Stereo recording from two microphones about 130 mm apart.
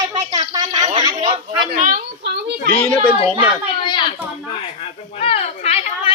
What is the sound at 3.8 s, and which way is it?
Speech, 35° left (ahead or behind).